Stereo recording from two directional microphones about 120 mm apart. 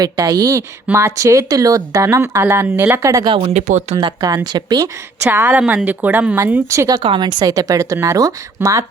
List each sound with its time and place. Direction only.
0.0 s speech: 30° right (ahead or behind)
3.3 s speech: 55° right (ahead or behind)
3.7 s speech: 75° right (ahead or behind)
4.0 s a woman's voice: 35° right (ahead or behind)
5.3 s speech: 15° right (ahead or behind)
7.0 s a woman's voice: 40° right (ahead or behind)